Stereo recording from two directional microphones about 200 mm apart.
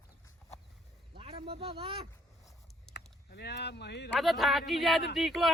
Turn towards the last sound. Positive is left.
turn(degrees=0)  # may be behind; listen again after turning